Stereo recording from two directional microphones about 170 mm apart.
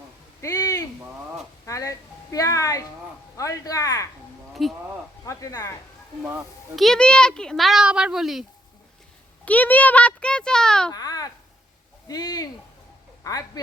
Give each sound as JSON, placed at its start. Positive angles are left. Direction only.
{"t": 0.4, "sound": "a sound", "side_deg": 20}
{"t": 1.6, "sound": "speech", "side_deg": 20}
{"t": 4.6, "sound": "a child's voice", "side_deg": 0}
{"t": 5.2, "sound": "speech", "side_deg": 20}
{"t": 6.7, "sound": "a child's voice", "side_deg": 0}
{"t": 9.4, "sound": "speech", "side_deg": 10}
{"t": 10.9, "sound": "babbling", "side_deg": 20}
{"t": 12.0, "sound": "speech", "side_deg": 25}